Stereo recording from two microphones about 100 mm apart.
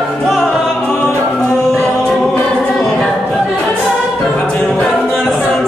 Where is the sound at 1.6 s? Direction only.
5° left (ahead or behind).